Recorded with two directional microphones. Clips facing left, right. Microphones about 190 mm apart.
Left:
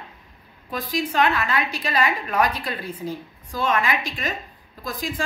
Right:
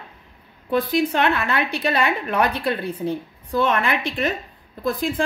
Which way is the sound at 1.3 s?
60° right (ahead or behind).